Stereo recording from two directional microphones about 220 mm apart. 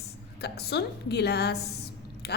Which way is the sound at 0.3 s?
50° left (ahead or behind).